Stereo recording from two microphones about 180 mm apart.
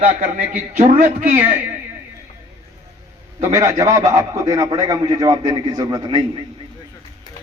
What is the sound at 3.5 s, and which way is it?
A man's voice, 15° right (ahead or behind).